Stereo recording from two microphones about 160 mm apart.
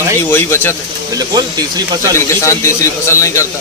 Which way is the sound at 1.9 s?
20° right (ahead or behind).